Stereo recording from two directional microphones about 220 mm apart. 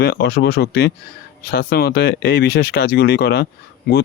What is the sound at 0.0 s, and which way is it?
Speech, 45° left (ahead or behind).